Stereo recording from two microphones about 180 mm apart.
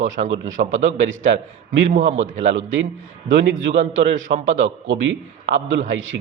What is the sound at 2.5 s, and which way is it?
A man's voice, 90° right.